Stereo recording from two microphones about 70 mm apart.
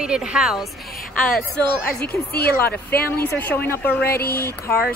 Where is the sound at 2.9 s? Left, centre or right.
Left.